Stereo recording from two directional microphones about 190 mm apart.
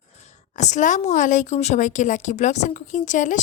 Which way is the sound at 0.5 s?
40° left (ahead or behind).